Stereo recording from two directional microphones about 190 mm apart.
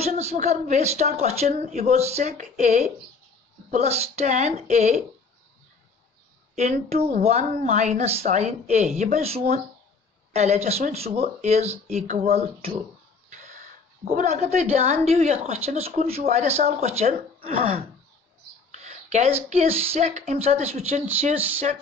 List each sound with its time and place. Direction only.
0.0 s a woman's voice: 35° right (ahead or behind)
6.5 s a woman's voice: 35° right (ahead or behind)
14.0 s a woman's voice: 35° right (ahead or behind)